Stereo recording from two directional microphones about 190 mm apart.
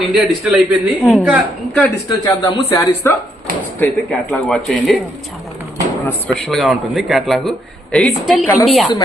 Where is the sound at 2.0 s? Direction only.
20° left (ahead or behind).